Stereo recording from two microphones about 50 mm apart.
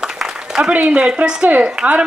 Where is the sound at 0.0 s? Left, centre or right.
Centre.